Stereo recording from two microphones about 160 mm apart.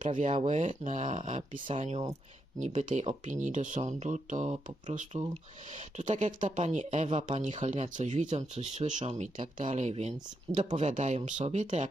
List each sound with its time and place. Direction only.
0.2 s speech: 45° right (ahead or behind)
2.6 s speech: 50° right (ahead or behind)